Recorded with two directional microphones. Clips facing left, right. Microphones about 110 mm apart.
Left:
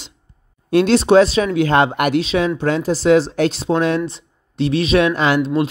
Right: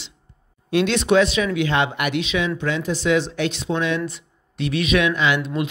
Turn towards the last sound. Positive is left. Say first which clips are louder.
# left 5 dB
turn(degrees=35)  # may be behind; listen again after turning